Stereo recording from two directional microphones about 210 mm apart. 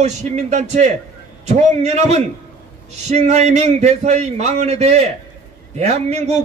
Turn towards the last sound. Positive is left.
turn(degrees=-30)  # may be behind; listen again after turning